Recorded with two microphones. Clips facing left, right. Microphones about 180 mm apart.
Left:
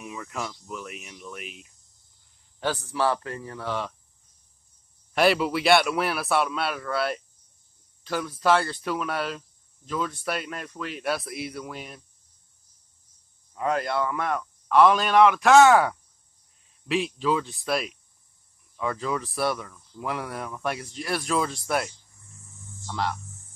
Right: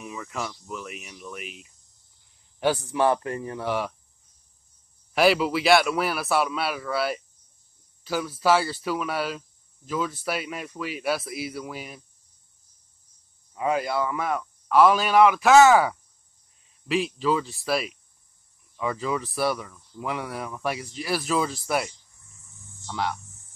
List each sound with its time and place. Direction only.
0.0 s speech: centre (ahead or behind)
2.6 s speech: 15° right (ahead or behind)
5.1 s speech: centre (ahead or behind)
13.6 s speech: 5° right (ahead or behind)